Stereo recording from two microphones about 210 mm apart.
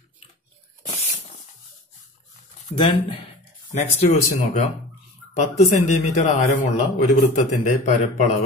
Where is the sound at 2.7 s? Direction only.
25° left (ahead or behind).